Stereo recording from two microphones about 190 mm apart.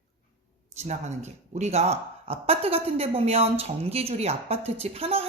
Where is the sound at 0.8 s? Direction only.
35° right (ahead or behind).